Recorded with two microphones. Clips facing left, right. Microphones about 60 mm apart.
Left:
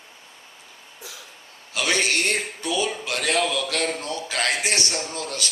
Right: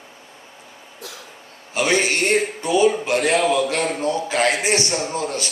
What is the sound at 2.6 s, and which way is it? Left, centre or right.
Speech, right.